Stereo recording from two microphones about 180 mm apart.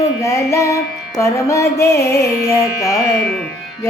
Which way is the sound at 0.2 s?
15° left (ahead or behind).